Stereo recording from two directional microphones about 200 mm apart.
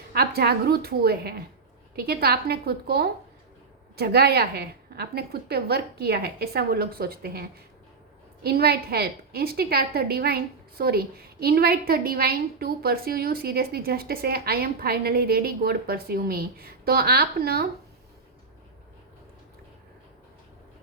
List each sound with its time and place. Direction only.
0.1 s a woman's voice: 50° right (ahead or behind)
8.4 s a woman's voice: 50° right (ahead or behind)